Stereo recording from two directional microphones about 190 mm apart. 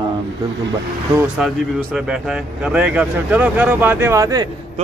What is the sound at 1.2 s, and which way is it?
A man's voice, centre (ahead or behind).